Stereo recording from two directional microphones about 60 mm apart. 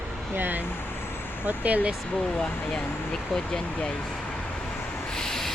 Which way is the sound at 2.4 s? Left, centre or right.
Centre.